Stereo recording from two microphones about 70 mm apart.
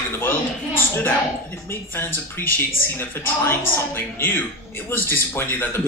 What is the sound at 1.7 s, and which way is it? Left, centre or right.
Speech, left.